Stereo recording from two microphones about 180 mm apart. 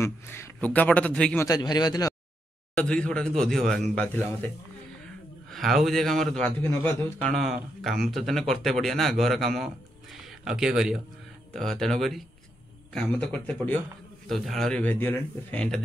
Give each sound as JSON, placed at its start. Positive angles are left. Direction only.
{"t": 0.0, "sound": "a man's voice", "side_deg": 15}
{"t": 1.4, "sound": "a man's voice", "side_deg": 20}
{"t": 2.7, "sound": "a man's voice", "side_deg": 5}
{"t": 5.5, "sound": "a man's voice", "side_deg": 0}
{"t": 6.6, "sound": "a man's voice", "side_deg": 15}